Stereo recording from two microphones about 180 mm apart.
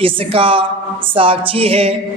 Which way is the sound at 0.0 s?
30° right (ahead or behind).